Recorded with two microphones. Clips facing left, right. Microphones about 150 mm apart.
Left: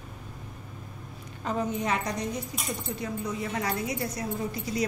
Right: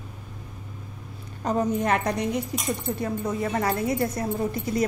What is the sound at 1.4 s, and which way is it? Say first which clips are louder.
Speech: right 5 dB; 40° right (ahead or behind).